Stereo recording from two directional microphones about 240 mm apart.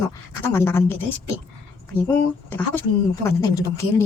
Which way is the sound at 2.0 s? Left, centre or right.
Centre.